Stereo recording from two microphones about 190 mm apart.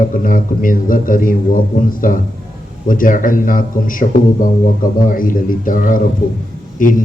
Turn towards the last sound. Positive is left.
turn(degrees=45)  # may be behind; listen again after turning